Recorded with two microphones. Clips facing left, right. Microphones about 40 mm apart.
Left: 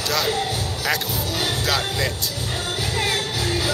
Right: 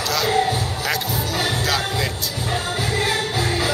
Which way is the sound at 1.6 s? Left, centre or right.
Centre.